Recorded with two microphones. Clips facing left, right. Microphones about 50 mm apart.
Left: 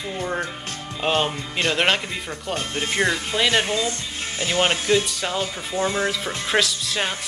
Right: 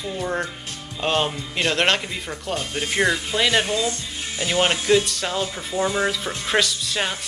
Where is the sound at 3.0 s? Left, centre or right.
Centre.